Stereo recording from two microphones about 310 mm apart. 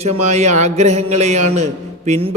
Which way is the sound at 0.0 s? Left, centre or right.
Right.